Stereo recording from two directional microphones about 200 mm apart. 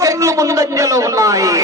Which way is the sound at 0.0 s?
15° right (ahead or behind).